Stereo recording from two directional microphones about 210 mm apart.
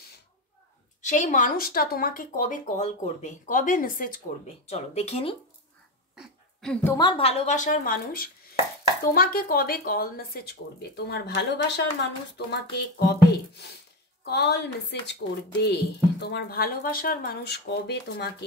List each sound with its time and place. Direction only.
1.0 s speech: 35° left (ahead or behind)
4.5 s speech: 30° left (ahead or behind)
6.1 s a woman's voice: 5° left (ahead or behind); by 18.3 s 55° left (ahead or behind)